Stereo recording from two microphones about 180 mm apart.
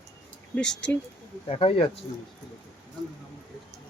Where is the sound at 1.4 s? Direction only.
30° left (ahead or behind).